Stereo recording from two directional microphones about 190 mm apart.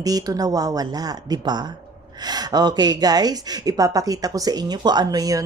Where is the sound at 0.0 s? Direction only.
20° right (ahead or behind).